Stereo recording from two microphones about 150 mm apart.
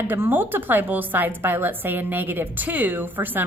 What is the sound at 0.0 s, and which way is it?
A woman's voice, 15° right (ahead or behind).